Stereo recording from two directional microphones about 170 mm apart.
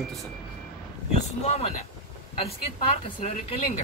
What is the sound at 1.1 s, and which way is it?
Speech, 40° left (ahead or behind).